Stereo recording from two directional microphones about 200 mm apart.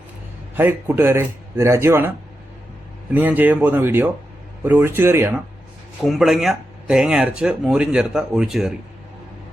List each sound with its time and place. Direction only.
0.5 s a man's voice: 10° right (ahead or behind)
6.1 s speech: centre (ahead or behind)